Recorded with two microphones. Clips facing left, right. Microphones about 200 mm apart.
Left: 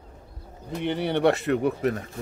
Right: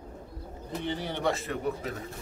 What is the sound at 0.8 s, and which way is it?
Speech, 65° left (ahead or behind).